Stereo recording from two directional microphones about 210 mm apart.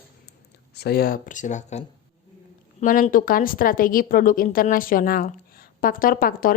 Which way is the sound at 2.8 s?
40° left (ahead or behind).